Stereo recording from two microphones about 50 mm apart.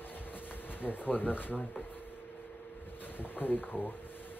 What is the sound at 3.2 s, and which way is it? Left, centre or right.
Speech, left.